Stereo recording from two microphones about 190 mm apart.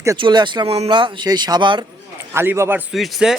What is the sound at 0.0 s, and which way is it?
Speech, 20° right (ahead or behind).